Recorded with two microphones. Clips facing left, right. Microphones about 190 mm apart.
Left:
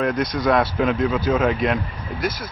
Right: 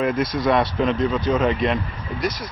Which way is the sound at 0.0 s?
Centre (ahead or behind).